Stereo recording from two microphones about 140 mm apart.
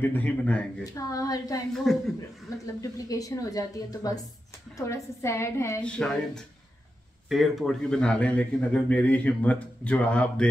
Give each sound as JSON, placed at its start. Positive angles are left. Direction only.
{"t": 0.0, "sound": "speech", "side_deg": 10}
{"t": 0.9, "sound": "a woman's voice", "side_deg": 25}
{"t": 1.9, "sound": "speech", "side_deg": 0}
{"t": 2.6, "sound": "a woman's voice", "side_deg": 25}
{"t": 5.9, "sound": "speech", "side_deg": 5}